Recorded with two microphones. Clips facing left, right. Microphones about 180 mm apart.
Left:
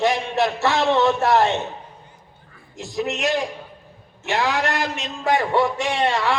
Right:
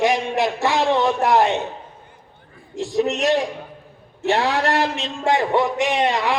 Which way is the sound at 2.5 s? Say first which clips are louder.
Right 6 dB; 30° right (ahead or behind).